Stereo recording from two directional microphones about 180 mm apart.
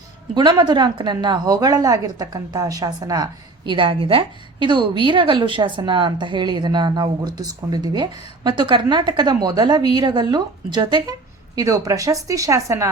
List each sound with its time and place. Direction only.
0.3 s a woman's voice: 25° right (ahead or behind)